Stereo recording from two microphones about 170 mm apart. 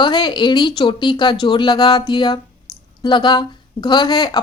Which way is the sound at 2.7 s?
25° left (ahead or behind).